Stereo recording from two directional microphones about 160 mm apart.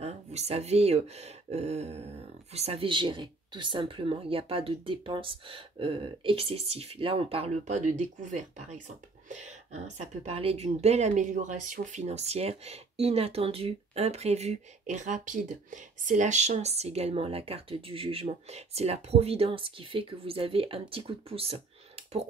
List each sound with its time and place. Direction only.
0.0 s speech: 40° right (ahead or behind)